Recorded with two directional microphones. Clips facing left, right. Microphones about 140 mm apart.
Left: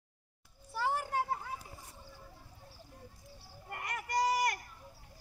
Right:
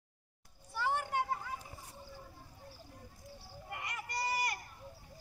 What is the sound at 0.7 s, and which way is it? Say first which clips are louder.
Children playing: left 1 dB; centre (ahead or behind).